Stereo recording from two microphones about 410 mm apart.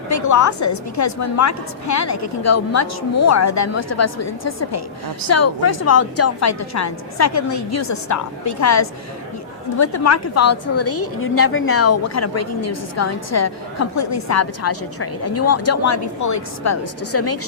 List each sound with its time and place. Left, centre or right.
0.1 s a woman's voice: left